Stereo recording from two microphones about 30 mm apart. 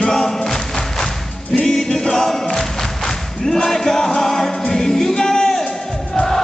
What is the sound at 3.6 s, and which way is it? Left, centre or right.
Music, centre.